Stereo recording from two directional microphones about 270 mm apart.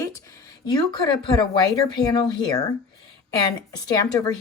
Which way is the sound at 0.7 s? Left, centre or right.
Centre.